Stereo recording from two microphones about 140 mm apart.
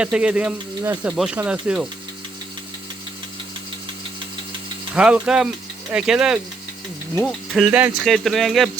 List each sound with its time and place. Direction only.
0.0 s speech: 5° right (ahead or behind)
0.8 s speech: 20° right (ahead or behind)
1.1 s speech: 5° right (ahead or behind)
4.9 s speech: 5° right (ahead or behind)
7.5 s speech: 5° right (ahead or behind)
8.0 s speech: centre (ahead or behind)